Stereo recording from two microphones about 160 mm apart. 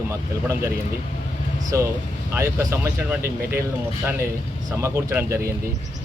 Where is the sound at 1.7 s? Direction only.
15° right (ahead or behind).